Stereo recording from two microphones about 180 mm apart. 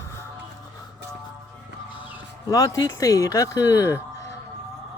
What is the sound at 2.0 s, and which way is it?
Speech, 25° left (ahead or behind).